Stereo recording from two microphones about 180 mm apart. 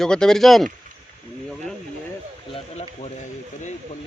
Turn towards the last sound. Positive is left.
turn(degrees=35)  # may be behind; listen again after turning